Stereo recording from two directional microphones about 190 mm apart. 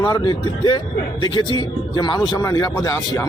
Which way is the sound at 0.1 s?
20° left (ahead or behind).